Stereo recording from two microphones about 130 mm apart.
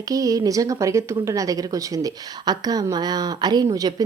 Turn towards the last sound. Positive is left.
turn(degrees=-30)  # may be behind; listen again after turning